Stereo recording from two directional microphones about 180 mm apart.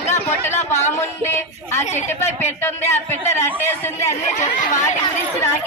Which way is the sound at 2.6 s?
15° left (ahead or behind).